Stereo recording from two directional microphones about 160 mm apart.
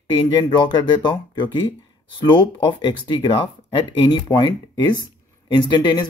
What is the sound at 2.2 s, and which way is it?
Speech, 30° left (ahead or behind).